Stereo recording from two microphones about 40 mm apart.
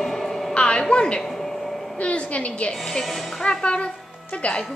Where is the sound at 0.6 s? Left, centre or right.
Left.